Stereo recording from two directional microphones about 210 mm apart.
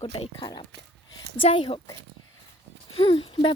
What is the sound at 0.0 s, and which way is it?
Speech, 25° left (ahead or behind).